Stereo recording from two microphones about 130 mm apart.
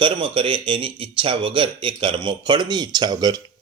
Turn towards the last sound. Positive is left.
turn(degrees=-30)  # may be behind; listen again after turning